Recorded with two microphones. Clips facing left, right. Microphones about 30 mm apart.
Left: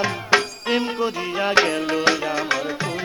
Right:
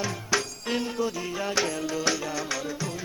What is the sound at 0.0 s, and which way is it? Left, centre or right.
Music, left.